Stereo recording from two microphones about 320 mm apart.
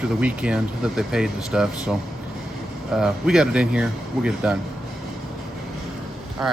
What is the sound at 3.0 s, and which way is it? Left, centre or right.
Speech, centre.